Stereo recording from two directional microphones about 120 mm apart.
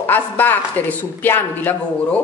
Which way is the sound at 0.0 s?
15° left (ahead or behind).